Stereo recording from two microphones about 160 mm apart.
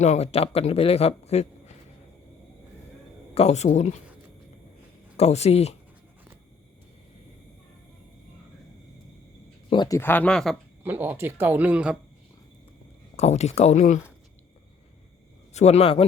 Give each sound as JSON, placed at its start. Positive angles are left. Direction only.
{"t": 0.0, "sound": "a man's voice", "side_deg": 45}
{"t": 3.3, "sound": "speech", "side_deg": 45}
{"t": 5.1, "sound": "speech", "side_deg": 40}
{"t": 9.6, "sound": "speech", "side_deg": 30}
{"t": 10.0, "sound": "speech", "side_deg": 10}
{"t": 10.8, "sound": "speech", "side_deg": -10}
{"t": 13.1, "sound": "speech", "side_deg": 40}
{"t": 15.5, "sound": "a man's voice", "side_deg": 40}